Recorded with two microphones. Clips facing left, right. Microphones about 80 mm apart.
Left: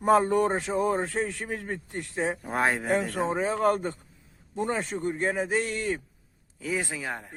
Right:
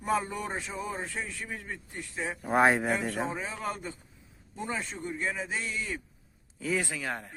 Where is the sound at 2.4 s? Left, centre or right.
Centre.